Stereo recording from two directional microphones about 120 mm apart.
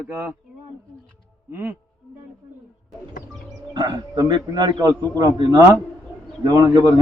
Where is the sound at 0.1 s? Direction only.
20° right (ahead or behind).